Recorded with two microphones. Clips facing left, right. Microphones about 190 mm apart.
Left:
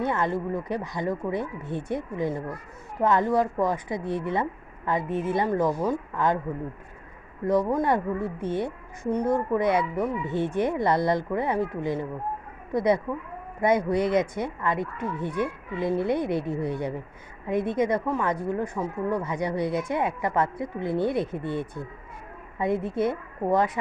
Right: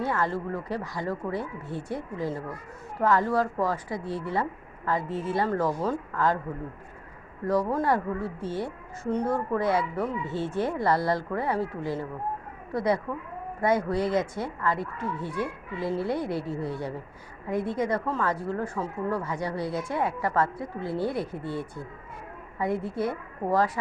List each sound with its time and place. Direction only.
0.0 s a woman's voice: 20° left (ahead or behind)
7.4 s a woman's voice: 20° left (ahead or behind)